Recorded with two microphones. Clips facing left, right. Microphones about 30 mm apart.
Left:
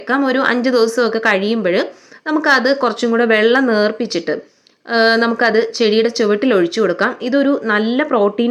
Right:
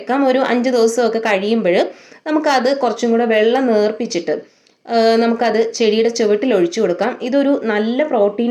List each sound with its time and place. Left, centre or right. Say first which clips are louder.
0.1 s a woman's voice: even; left
3.2 s speech: left 3 dB; left
3.9 s a woman's voice: even; left
7.3 s speech: even; centre
7.7 s speech: left 1 dB; left